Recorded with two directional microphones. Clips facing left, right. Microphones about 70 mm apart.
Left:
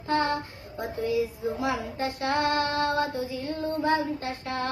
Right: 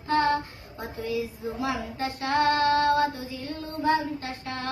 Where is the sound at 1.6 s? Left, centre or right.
Left.